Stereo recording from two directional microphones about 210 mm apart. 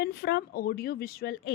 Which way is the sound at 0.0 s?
50° left (ahead or behind).